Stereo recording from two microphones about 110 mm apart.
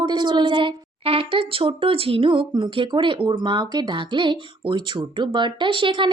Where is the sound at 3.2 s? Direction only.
45° right (ahead or behind).